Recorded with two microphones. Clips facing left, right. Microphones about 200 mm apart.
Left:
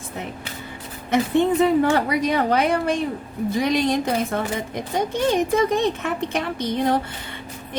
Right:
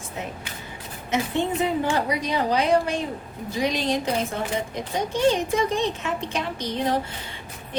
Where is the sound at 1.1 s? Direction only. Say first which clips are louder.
Left 6 dB; 60° left (ahead or behind).